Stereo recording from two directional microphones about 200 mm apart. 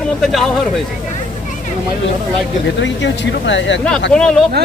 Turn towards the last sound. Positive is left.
turn(degrees=5)  # may be behind; listen again after turning